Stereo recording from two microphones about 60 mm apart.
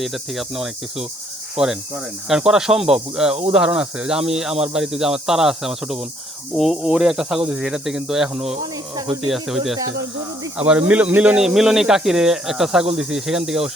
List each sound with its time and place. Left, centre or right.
0.0 s cricket: centre
1.5 s speech: centre
9.2 s cricket: centre
10.6 s speech: right
11.3 s speech: centre